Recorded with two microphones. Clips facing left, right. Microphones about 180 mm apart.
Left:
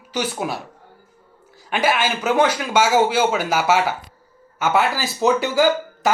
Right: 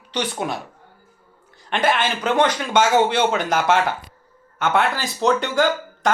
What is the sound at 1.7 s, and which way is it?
Speech, 5° left (ahead or behind).